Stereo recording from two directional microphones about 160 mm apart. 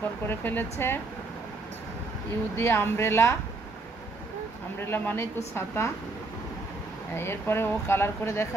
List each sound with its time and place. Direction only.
0.3 s speech: 15° left (ahead or behind)
2.5 s speech: 15° left (ahead or behind)
4.7 s speech: 15° left (ahead or behind)
7.2 s speech: 15° left (ahead or behind)